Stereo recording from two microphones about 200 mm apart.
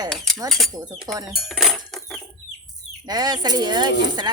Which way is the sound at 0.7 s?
20° right (ahead or behind).